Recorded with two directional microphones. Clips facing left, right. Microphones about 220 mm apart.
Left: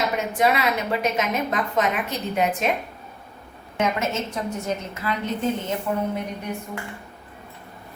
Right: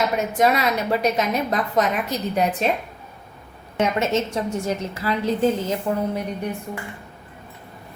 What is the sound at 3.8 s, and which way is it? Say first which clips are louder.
A woman's voice: right 3 dB; 30° right (ahead or behind).